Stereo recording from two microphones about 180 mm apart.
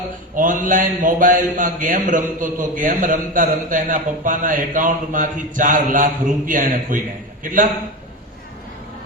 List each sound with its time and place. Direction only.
0.3 s a man's voice: 45° right (ahead or behind)